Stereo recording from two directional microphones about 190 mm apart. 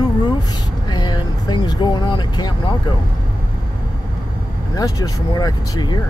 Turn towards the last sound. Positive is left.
turn(degrees=20)  # may be behind; listen again after turning